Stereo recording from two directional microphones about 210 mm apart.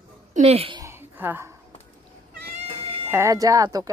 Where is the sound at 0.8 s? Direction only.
10° right (ahead or behind).